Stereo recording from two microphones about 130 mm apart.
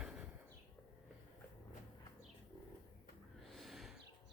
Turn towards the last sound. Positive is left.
turn(degrees=0)  # may be behind; listen again after turning